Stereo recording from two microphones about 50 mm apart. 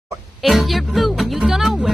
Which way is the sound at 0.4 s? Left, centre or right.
Centre.